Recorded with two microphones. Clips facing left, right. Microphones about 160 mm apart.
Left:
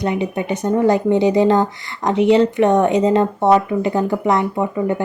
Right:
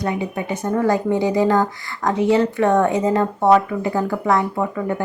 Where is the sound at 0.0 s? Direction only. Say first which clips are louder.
Left 3 dB; 20° left (ahead or behind).